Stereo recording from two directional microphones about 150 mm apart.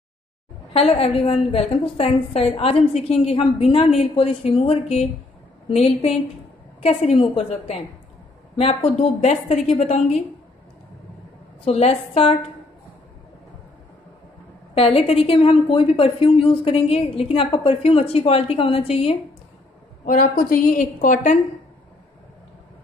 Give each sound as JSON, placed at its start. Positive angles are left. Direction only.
{"t": 0.7, "sound": "a woman's voice", "side_deg": 40}
{"t": 11.6, "sound": "a woman's voice", "side_deg": 45}
{"t": 14.7, "sound": "a woman's voice", "side_deg": 40}
{"t": 20.1, "sound": "a woman's voice", "side_deg": 65}